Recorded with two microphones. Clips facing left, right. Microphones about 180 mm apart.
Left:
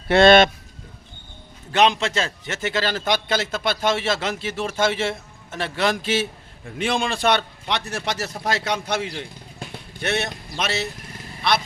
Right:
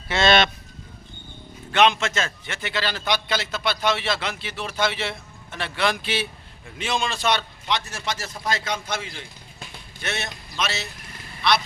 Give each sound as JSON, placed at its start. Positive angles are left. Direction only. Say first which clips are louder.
{"t": 0.1, "sound": "a man's voice", "louder": "left 7 dB", "side_deg": 55}
{"t": 1.7, "sound": "a man's voice", "louder": "left 1 dB", "side_deg": 35}
{"t": 6.7, "sound": "a man's voice", "louder": "left 3 dB", "side_deg": 55}